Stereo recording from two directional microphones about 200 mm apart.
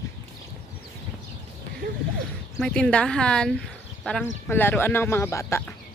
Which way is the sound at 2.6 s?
5° left (ahead or behind).